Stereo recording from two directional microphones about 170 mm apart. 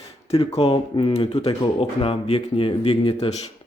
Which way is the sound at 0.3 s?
35° left (ahead or behind).